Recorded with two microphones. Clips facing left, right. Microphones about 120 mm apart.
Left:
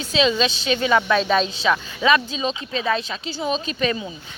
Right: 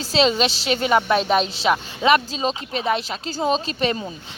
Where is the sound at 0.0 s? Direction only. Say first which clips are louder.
Right 1 dB; 35° right (ahead or behind).